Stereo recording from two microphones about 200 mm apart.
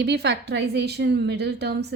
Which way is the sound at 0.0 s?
55° right (ahead or behind).